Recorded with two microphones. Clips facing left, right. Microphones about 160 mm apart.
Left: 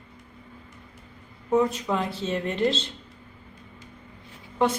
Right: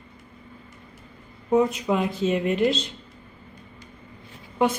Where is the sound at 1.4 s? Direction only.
15° right (ahead or behind).